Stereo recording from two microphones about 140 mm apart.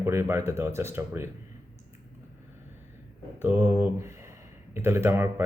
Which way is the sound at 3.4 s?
15° right (ahead or behind).